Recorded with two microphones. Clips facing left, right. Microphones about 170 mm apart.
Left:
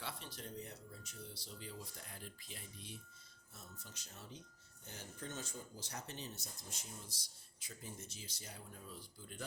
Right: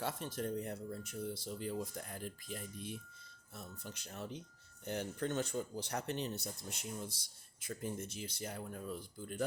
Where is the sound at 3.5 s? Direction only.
60° right (ahead or behind).